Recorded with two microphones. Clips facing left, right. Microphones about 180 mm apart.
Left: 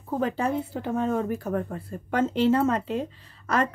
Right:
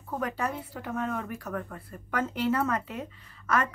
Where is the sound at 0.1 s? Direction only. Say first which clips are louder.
Left 6 dB; 25° left (ahead or behind).